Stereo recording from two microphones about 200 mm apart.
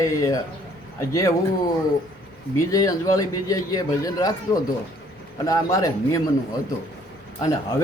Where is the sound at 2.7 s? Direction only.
15° left (ahead or behind).